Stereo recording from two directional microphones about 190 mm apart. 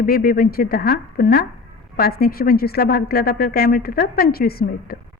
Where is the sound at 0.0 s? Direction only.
50° left (ahead or behind).